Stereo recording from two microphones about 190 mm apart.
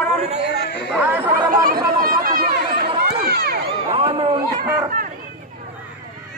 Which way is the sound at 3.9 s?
30° right (ahead or behind).